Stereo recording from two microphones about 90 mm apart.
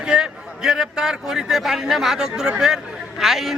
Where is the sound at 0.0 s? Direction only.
10° right (ahead or behind).